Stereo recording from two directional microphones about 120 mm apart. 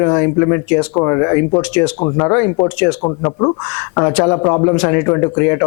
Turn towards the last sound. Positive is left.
turn(degrees=25)  # may be behind; listen again after turning